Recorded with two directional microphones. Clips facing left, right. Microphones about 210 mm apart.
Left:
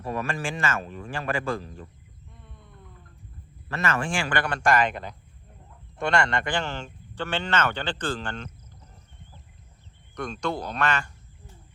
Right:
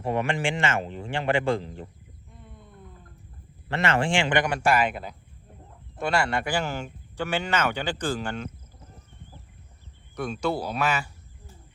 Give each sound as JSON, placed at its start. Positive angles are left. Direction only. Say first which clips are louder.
{"t": 0.0, "sound": "a man's voice", "louder": "right 4 dB", "side_deg": -25}
{"t": 3.7, "sound": "speech", "louder": "right 3 dB", "side_deg": -30}
{"t": 10.2, "sound": "speech", "louder": "right 2 dB", "side_deg": -5}